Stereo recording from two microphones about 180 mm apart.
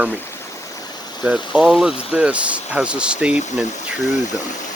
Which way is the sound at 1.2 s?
5° right (ahead or behind).